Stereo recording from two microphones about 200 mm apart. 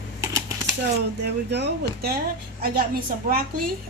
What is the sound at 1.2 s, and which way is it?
Speech, 60° right (ahead or behind).